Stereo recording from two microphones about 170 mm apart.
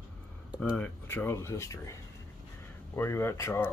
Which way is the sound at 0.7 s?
15° left (ahead or behind).